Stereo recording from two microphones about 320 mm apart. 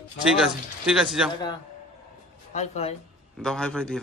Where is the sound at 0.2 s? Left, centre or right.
Centre.